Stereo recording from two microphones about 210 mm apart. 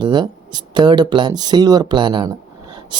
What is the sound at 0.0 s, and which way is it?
Speech, 20° right (ahead or behind).